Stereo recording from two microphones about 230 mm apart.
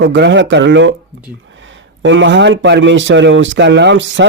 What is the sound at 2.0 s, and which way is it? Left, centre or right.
Speech, right.